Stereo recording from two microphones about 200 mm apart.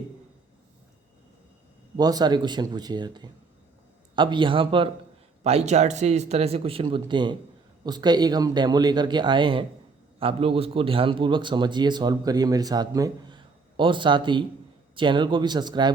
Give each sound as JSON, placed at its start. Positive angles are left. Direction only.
{"t": 2.0, "sound": "a man's voice", "side_deg": -20}